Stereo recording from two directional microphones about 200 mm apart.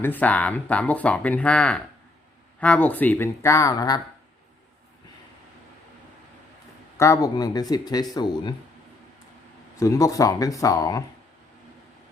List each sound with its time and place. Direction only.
0.0 s speech: 10° left (ahead or behind)
6.9 s speech: 15° left (ahead or behind)
9.7 s speech: 15° left (ahead or behind)